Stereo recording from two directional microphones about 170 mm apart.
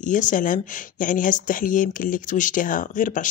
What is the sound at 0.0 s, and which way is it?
Speech, 50° left (ahead or behind).